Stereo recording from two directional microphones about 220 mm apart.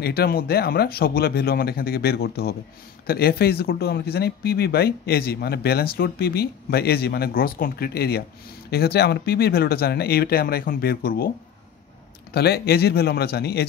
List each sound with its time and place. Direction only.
0.0 s speech: 45° left (ahead or behind)
12.4 s speech: 45° left (ahead or behind)